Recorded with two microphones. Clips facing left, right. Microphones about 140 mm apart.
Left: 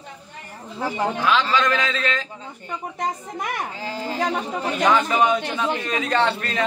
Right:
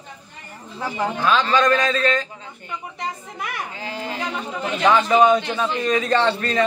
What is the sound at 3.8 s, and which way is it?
Speech, 35° left (ahead or behind).